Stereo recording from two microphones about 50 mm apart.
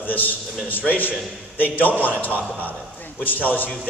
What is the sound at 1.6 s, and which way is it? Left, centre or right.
Speech, left.